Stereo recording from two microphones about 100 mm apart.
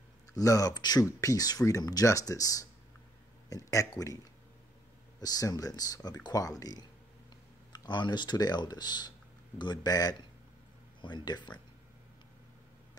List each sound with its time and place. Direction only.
0.4 s speech: 35° left (ahead or behind)
5.2 s speech: 40° left (ahead or behind)